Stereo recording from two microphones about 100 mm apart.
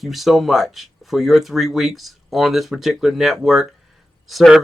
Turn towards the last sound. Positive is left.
turn(degrees=0)  # may be behind; listen again after turning